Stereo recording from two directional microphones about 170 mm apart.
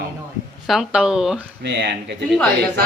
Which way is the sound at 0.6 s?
Centre (ahead or behind).